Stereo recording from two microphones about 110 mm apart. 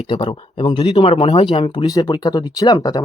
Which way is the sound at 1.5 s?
50° left (ahead or behind).